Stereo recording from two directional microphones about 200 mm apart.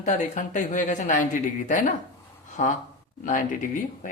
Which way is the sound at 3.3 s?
40° left (ahead or behind).